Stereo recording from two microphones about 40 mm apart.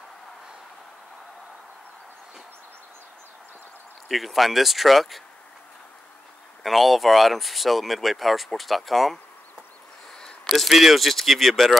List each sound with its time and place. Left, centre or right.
4.1 s speech: centre
6.6 s speech: centre
10.1 s a sound: centre
10.5 s speech: centre